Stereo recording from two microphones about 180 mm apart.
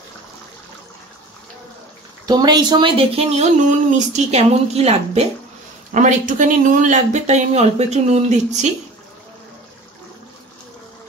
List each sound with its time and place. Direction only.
2.2 s speech: 25° right (ahead or behind); by 8.7 s 40° right (ahead or behind)